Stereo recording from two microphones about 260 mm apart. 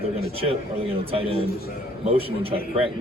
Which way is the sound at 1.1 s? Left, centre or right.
Right.